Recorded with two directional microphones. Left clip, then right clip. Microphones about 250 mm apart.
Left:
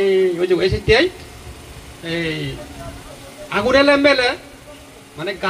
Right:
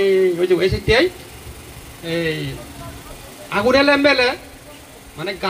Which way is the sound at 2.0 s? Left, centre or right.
Centre.